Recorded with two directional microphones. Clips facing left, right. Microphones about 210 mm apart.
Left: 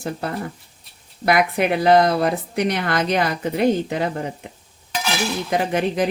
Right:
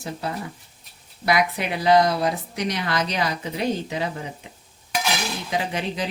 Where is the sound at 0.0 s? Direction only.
55° left (ahead or behind).